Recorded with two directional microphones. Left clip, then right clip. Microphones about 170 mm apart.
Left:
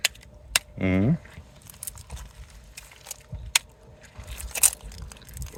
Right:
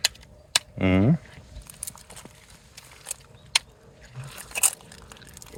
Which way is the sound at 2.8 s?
10° left (ahead or behind).